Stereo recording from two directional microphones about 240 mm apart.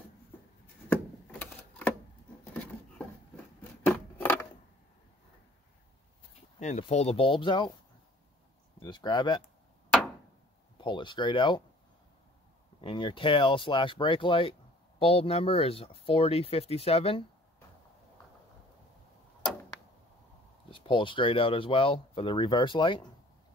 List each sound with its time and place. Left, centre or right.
1.4 s typewriter: centre
3.8 s scissors: centre
6.6 s speech: left
8.7 s speech: centre
10.8 s speech: centre
12.8 s speech: left
20.7 s speech: left